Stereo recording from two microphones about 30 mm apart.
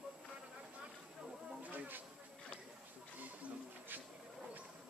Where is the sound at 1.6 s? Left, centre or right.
Right.